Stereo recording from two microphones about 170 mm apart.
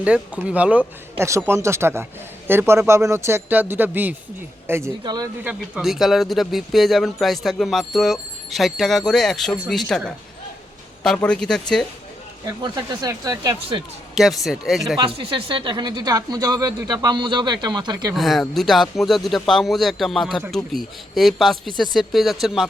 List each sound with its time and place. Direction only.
0.0 s speech: 5° right (ahead or behind); by 5.3 s 20° right (ahead or behind)
5.4 s speech: 5° right (ahead or behind)
12.5 s speech: 25° right (ahead or behind)
14.2 s speech: centre (ahead or behind)
14.9 s speech: 30° right (ahead or behind)
18.1 s speech: centre (ahead or behind)